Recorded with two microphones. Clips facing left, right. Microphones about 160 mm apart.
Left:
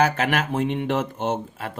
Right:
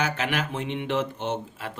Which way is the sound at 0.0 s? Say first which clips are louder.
Left 6 dB; 45° left (ahead or behind).